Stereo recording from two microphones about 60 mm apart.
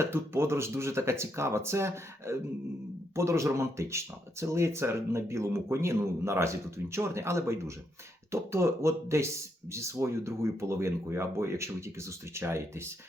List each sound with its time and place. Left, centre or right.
0.0 s speech: right